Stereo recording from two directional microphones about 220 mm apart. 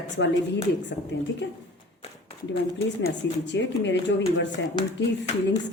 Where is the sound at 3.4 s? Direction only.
55° left (ahead or behind).